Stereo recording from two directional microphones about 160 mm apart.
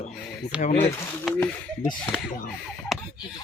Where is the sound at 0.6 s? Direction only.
40° left (ahead or behind).